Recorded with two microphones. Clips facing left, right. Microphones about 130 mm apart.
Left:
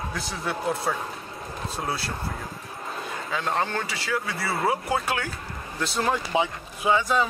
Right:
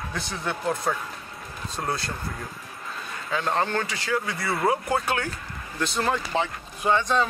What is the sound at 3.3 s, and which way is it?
Speech, centre (ahead or behind).